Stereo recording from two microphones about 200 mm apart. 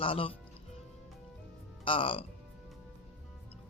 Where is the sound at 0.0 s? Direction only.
25° left (ahead or behind).